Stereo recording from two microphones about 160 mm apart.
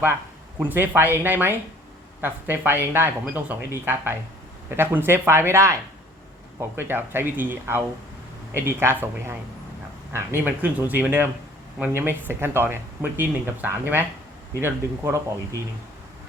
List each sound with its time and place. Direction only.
0.6 s speech: 10° right (ahead or behind)